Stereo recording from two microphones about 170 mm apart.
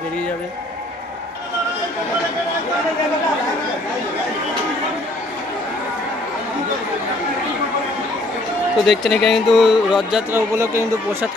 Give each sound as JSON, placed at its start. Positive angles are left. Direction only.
{"t": 8.7, "sound": "speech", "side_deg": 0}
{"t": 10.3, "sound": "speech", "side_deg": -15}